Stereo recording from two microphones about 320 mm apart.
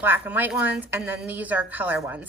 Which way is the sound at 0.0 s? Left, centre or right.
Centre.